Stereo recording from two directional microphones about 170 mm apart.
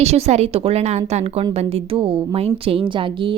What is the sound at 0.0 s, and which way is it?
A woman's voice, 40° right (ahead or behind).